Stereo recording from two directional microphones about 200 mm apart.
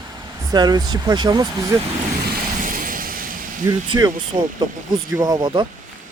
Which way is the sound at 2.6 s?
40° right (ahead or behind).